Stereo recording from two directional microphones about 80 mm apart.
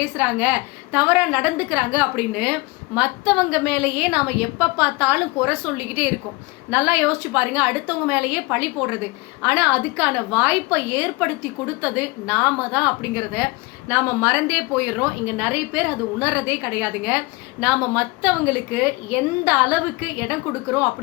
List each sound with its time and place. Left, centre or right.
0.2 s a woman's voice: centre